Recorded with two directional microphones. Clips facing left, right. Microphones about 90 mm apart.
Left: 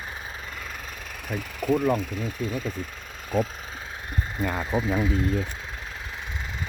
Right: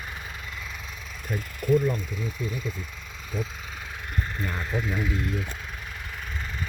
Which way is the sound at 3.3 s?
50° left (ahead or behind).